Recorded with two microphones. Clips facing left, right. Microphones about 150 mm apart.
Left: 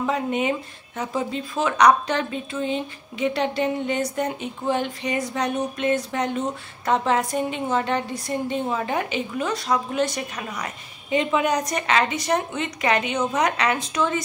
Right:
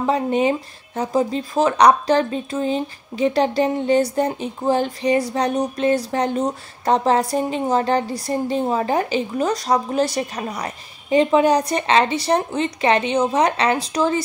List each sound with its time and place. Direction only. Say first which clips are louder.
0.0 s speech: right 5 dB; 35° right (ahead or behind)